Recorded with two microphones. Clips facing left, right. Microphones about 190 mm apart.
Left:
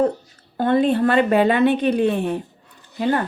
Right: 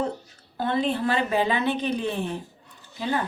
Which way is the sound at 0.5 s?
50° left (ahead or behind).